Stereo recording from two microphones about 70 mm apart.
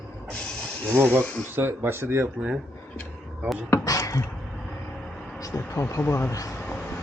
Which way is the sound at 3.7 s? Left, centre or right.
Left.